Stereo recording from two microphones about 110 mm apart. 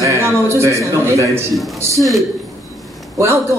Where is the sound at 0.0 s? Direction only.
25° right (ahead or behind).